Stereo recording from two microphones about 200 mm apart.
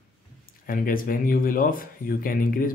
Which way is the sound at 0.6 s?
45° left (ahead or behind).